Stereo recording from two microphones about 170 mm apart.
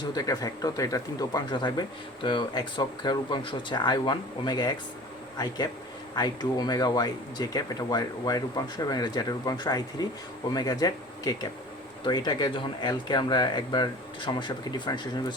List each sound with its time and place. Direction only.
0.0 s speech: 20° left (ahead or behind)
6.1 s speech: 25° left (ahead or behind)